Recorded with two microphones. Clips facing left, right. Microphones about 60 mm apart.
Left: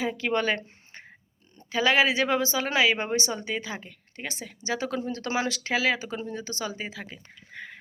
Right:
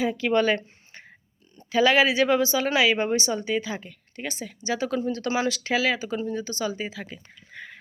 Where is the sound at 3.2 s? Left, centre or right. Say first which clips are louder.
Right 4 dB; left.